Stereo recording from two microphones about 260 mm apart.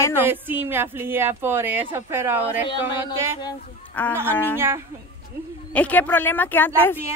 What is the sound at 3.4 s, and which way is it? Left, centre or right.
A man's voice, centre.